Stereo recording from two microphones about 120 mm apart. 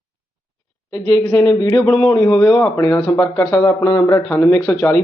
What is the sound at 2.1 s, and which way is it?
A man's voice, 30° left (ahead or behind).